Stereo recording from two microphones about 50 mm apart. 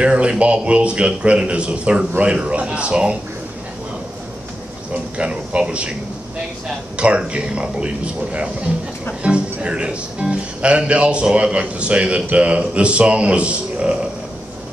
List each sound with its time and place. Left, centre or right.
0.0 s speech: right
4.9 s speech: right
7.0 s speech: right